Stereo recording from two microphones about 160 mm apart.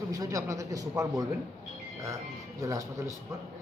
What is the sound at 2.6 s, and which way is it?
Speech, 20° right (ahead or behind).